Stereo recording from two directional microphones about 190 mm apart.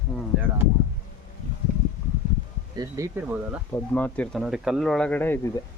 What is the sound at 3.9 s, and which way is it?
Speech, 5° left (ahead or behind).